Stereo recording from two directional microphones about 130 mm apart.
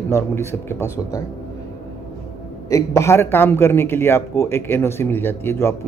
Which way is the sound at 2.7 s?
25° left (ahead or behind).